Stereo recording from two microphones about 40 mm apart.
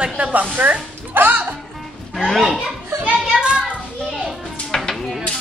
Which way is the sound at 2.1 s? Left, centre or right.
Centre.